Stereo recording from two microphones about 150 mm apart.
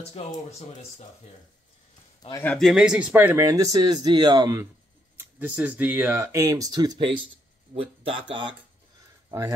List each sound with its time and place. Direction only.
0.2 s speech: 40° left (ahead or behind)
2.4 s speech: 10° left (ahead or behind)
2.7 s speech: 5° right (ahead or behind)
3.4 s speech: 25° right (ahead or behind)
5.4 s speech: 10° right (ahead or behind); by 8.5 s 35° right (ahead or behind)